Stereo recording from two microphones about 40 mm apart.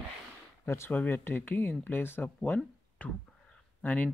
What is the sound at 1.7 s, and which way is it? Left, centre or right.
Speech, left.